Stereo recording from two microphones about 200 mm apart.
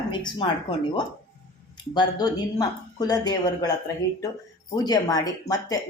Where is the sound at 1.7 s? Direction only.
20° left (ahead or behind).